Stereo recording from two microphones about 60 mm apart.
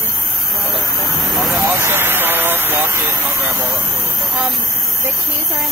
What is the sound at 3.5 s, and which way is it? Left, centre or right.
Speech, right.